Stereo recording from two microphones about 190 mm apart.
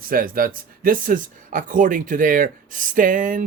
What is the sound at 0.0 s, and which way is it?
Speech, 50° right (ahead or behind).